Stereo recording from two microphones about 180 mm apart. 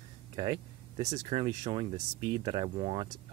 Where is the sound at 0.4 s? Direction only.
25° right (ahead or behind).